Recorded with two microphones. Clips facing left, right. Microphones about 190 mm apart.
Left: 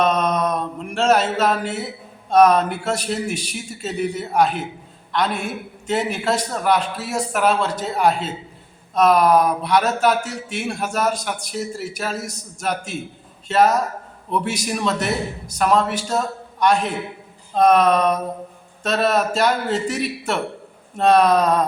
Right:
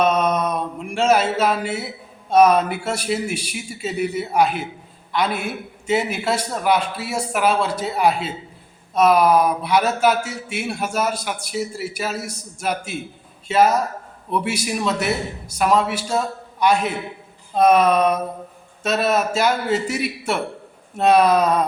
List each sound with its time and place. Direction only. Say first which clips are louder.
0.0 s mantra: even; 5° right (ahead or behind)
2.3 s speech: even; 10° right (ahead or behind)